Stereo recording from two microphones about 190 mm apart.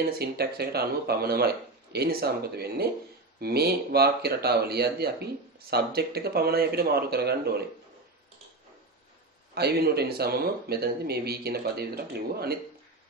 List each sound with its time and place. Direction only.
0.0 s speech: 55° right (ahead or behind)
9.5 s speech: 55° right (ahead or behind)